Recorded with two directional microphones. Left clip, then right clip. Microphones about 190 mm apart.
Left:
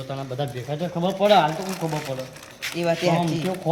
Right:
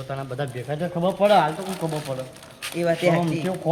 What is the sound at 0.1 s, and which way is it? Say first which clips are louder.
Speech: even; 10° left (ahead or behind).